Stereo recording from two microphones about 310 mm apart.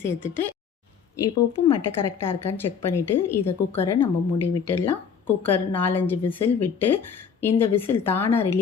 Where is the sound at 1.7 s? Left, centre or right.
Centre.